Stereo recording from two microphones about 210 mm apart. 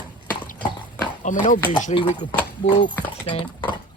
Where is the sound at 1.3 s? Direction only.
35° left (ahead or behind).